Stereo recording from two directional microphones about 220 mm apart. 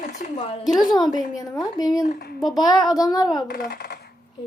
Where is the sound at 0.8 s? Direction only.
20° left (ahead or behind).